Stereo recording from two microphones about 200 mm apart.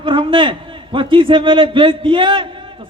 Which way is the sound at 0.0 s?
25° right (ahead or behind).